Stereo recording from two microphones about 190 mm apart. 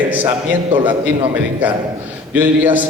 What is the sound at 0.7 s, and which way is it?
Speech, 25° right (ahead or behind).